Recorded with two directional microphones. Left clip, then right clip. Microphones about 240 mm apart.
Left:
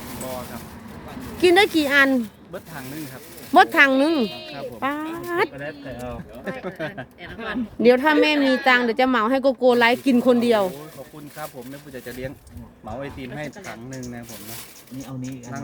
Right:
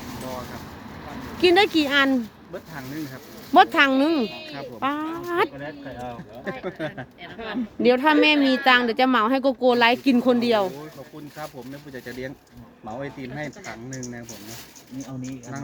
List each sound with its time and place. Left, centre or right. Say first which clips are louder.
1.4 s speech: left 1 dB; centre
5.5 s speech: left 2 dB; left
6.7 s speech: even; centre
7.3 s speech: left 2 dB; left
7.8 s speech: left 2 dB; centre
11.9 s speech: left 1 dB; centre
13.3 s speech: left 1 dB; centre